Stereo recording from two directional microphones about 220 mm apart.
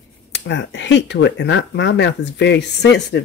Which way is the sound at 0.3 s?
55° left (ahead or behind).